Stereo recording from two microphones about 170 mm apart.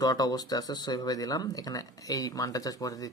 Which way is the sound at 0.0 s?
20° left (ahead or behind).